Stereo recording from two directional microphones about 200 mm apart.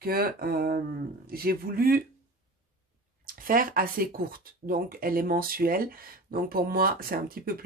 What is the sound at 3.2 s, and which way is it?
Speech, 45° right (ahead or behind).